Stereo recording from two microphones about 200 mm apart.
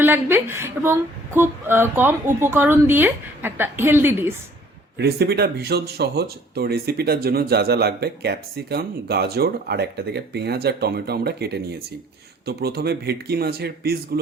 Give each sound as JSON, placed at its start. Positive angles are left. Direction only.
{"t": 0.0, "sound": "speech", "side_deg": -10}
{"t": 4.9, "sound": "speech", "side_deg": -55}